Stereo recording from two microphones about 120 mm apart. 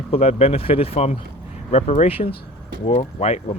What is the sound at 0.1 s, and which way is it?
Speech, 60° left (ahead or behind).